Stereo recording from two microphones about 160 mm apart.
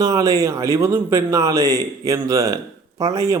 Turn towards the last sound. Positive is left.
turn(degrees=-20)  # may be behind; listen again after turning